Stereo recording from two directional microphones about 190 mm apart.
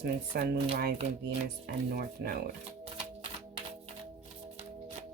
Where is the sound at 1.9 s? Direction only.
50° right (ahead or behind).